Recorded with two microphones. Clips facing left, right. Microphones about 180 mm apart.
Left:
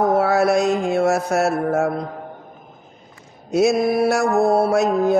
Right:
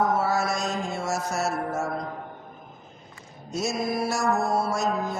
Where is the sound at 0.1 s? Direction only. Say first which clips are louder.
Left 9 dB; 60° left (ahead or behind).